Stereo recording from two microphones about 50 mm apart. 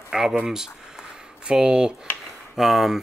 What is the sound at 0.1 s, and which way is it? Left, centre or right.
Speech, centre.